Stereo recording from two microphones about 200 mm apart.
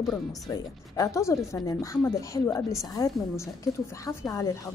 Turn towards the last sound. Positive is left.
turn(degrees=15)  # may be behind; listen again after turning